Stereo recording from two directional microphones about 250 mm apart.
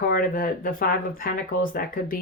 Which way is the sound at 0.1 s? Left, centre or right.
Left.